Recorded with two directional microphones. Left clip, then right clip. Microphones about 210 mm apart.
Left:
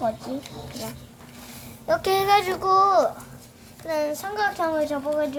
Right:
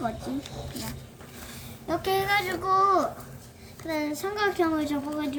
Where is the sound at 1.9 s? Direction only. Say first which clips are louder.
Left 6 dB; 45° left (ahead or behind).